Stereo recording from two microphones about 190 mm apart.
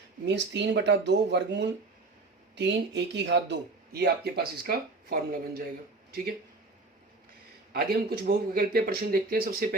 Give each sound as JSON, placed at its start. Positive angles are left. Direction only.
{"t": 0.3, "sound": "speech", "side_deg": -65}
{"t": 7.7, "sound": "speech", "side_deg": -50}